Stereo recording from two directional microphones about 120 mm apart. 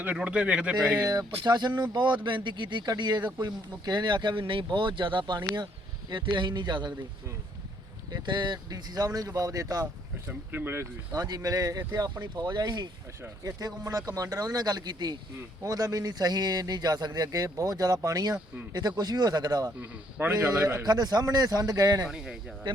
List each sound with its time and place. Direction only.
0.0 s a man's voice: 10° right (ahead or behind)
1.5 s a man's voice: 35° right (ahead or behind)
8.1 s a man's voice: 40° right (ahead or behind)
10.2 s a man's voice: 15° right (ahead or behind)
11.1 s a man's voice: 35° right (ahead or behind)
19.8 s a man's voice: 15° right (ahead or behind)
20.8 s a man's voice: 35° right (ahead or behind)
22.0 s speech: 5° right (ahead or behind)
22.7 s speech: 45° right (ahead or behind)